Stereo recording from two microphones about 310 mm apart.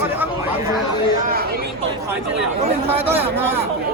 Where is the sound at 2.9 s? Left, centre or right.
Centre.